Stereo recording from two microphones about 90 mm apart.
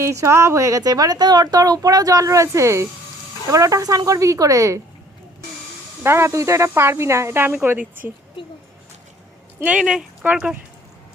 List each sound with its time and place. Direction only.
0.0 s speech: 35° right (ahead or behind)
6.0 s speech: 30° right (ahead or behind)
9.6 s speech: 10° right (ahead or behind)